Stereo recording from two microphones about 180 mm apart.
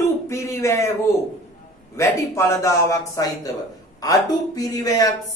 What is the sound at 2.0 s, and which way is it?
A man's voice, 15° left (ahead or behind).